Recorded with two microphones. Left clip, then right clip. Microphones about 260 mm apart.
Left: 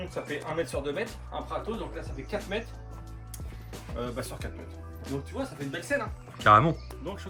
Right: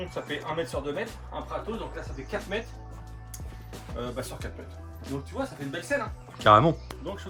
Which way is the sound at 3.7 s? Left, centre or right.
Centre.